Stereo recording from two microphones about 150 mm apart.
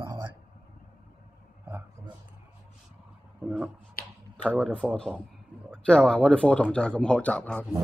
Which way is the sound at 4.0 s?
80° left.